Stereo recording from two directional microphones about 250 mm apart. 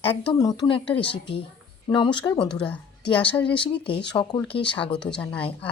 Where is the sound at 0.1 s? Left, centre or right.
Centre.